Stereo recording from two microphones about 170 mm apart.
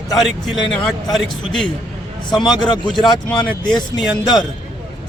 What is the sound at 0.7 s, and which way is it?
A man's voice, centre (ahead or behind).